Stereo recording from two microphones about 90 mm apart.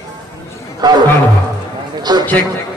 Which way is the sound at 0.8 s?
50° right (ahead or behind).